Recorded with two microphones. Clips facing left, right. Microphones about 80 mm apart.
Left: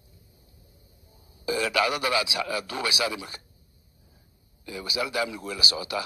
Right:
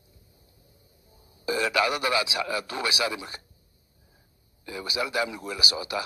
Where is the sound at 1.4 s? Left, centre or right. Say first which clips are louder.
Even; right.